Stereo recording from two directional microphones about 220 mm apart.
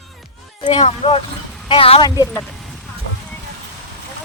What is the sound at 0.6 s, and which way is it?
Speech, 25° left (ahead or behind).